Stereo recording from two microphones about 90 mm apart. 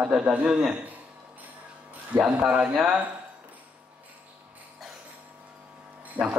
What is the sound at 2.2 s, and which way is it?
Speech, 10° right (ahead or behind).